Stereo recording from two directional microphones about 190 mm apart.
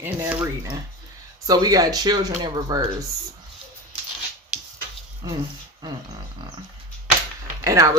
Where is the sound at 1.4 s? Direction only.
20° right (ahead or behind).